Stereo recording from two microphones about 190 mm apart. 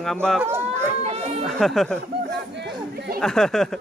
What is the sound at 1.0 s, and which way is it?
Chatter, 35° right (ahead or behind).